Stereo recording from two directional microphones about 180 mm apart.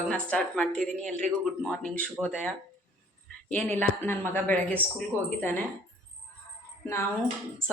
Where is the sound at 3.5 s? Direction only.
5° left (ahead or behind).